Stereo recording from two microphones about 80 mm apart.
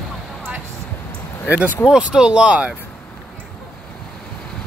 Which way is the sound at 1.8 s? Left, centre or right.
Centre.